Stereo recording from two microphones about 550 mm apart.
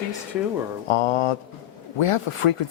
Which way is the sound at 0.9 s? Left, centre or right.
Left.